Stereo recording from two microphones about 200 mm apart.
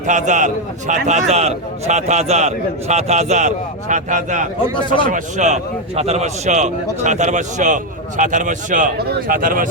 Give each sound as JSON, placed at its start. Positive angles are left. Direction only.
{"t": 0.0, "sound": "a man's voice", "side_deg": -40}